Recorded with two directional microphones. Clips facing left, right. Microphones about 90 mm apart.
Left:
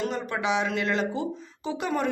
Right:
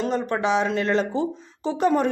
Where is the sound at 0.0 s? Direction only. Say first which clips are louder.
Right 5 dB; 35° right (ahead or behind).